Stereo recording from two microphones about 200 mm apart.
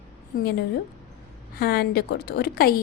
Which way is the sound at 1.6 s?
50° left (ahead or behind).